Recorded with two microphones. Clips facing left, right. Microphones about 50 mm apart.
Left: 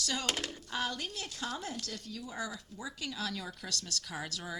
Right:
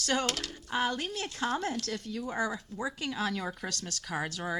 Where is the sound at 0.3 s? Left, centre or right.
Left.